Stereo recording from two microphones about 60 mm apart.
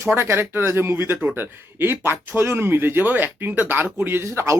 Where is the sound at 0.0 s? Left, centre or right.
Right.